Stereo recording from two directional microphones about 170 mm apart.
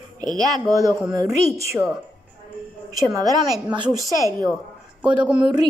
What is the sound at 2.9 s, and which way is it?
A woman's voice, 20° right (ahead or behind).